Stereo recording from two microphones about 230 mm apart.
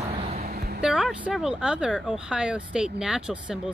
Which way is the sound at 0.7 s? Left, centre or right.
Centre.